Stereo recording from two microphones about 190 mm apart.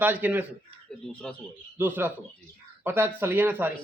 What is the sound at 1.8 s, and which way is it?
A man's voice, 10° right (ahead or behind).